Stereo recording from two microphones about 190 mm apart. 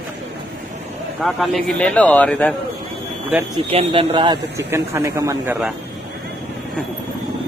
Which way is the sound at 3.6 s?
30° right (ahead or behind).